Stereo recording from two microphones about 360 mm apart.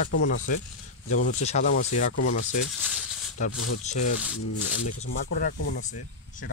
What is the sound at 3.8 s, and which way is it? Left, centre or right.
Speech, centre.